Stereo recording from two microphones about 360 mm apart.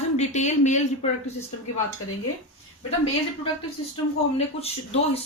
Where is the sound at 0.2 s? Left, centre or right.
Centre.